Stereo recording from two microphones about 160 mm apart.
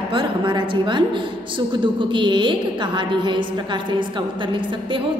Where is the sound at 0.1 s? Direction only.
30° right (ahead or behind).